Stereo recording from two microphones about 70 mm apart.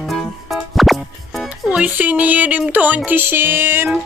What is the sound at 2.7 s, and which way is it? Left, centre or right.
Speech, right.